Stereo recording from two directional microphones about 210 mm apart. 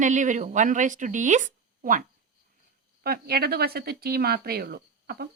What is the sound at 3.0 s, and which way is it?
A woman's voice, 45° right (ahead or behind).